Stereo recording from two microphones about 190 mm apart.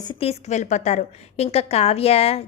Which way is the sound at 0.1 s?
30° left (ahead or behind).